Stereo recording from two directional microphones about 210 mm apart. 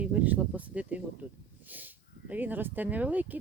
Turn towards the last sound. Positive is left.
turn(degrees=-10)  # may be behind; listen again after turning